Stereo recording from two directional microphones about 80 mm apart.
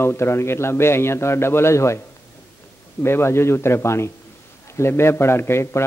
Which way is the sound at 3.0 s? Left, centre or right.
Left.